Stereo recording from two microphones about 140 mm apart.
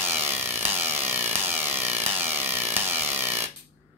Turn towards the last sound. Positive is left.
turn(degrees=-15)  # may be behind; listen again after turning